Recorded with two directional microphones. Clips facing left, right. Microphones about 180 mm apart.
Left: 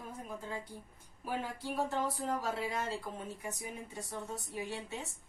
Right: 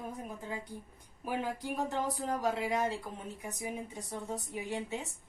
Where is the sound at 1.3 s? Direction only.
15° right (ahead or behind).